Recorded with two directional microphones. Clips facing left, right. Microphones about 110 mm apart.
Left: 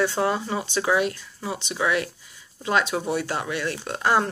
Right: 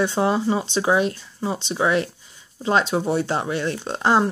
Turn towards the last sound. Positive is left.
turn(degrees=-25)  # may be behind; listen again after turning